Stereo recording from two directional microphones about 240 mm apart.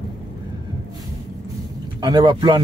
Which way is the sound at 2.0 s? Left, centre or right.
Centre.